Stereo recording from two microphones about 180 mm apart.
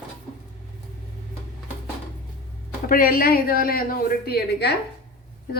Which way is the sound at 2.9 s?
55° left (ahead or behind).